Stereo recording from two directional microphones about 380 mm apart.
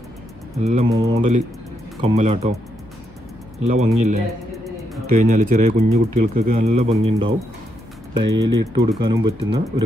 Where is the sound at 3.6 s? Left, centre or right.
Centre.